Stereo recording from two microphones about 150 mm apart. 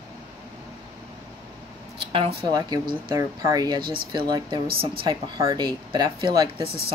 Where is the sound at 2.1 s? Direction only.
40° right (ahead or behind).